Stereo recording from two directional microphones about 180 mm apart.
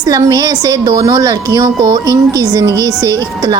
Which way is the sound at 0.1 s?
20° right (ahead or behind).